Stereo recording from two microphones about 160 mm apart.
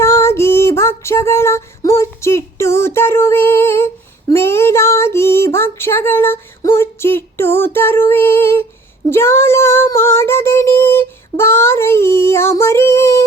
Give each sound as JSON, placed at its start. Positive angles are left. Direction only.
{"t": 0.0, "sound": "female singing", "side_deg": 15}
{"t": 9.0, "sound": "child singing", "side_deg": 15}